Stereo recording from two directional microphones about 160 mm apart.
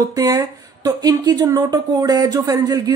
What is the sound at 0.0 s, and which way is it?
Speech, 25° right (ahead or behind).